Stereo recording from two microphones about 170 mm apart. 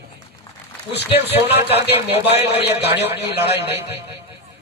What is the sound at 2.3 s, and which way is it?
A man's voice, 80° left.